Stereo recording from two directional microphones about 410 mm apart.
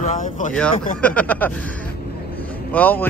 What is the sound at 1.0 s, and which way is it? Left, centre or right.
A man's voice, centre.